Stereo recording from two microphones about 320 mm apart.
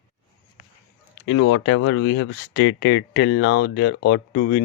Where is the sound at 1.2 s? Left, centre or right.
Left.